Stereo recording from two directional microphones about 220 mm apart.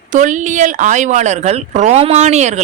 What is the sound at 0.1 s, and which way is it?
A woman's voice, 35° right (ahead or behind).